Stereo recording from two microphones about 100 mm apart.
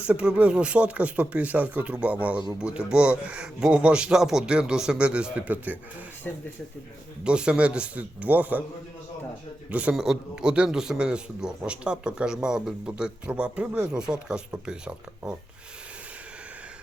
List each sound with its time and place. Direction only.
0.0 s a man's voice: 10° right (ahead or behind)
6.3 s speech: 20° left (ahead or behind)
7.3 s a man's voice: 10° right (ahead or behind)
9.6 s a man's voice: 15° right (ahead or behind)